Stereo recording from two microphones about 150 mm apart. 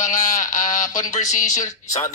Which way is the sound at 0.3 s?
60° left (ahead or behind).